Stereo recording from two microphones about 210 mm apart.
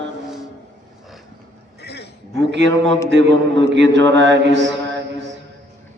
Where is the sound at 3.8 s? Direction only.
60° right (ahead or behind).